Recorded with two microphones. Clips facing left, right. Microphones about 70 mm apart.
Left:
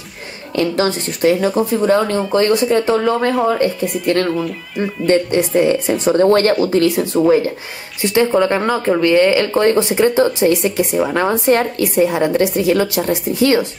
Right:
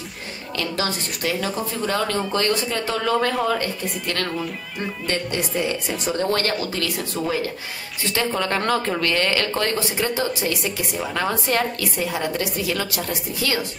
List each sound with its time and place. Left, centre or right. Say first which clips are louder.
0.6 s speech: left 9 dB; left
2.1 s speech: left 8 dB; centre